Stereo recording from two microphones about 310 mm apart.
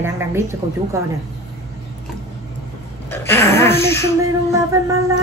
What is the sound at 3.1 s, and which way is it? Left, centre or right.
Speech, centre.